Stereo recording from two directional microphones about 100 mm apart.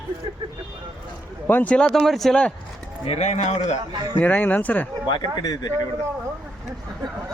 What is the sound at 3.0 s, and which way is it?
Speech, 90° left.